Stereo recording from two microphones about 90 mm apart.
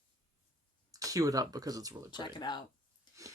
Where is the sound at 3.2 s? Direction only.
35° right (ahead or behind).